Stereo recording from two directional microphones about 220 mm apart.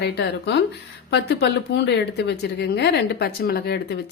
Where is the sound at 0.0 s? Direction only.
50° left (ahead or behind).